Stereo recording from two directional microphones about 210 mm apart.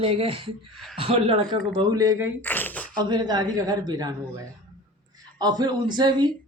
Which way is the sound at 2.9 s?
20° right (ahead or behind).